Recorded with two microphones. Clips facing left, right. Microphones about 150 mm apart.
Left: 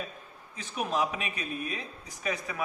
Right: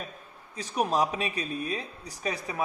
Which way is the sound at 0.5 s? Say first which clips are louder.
Right 4 dB; 35° right (ahead or behind).